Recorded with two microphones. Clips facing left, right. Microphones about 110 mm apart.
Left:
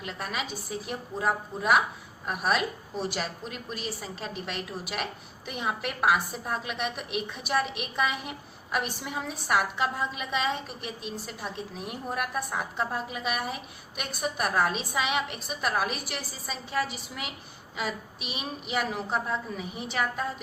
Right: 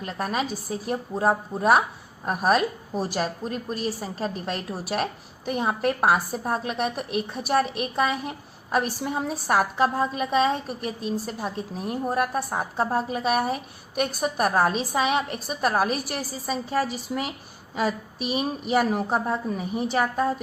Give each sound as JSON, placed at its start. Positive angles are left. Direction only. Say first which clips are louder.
{"t": 0.0, "sound": "a woman's voice", "louder": "right 7 dB", "side_deg": -40}